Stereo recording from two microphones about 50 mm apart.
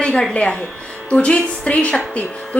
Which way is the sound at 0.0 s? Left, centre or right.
Left.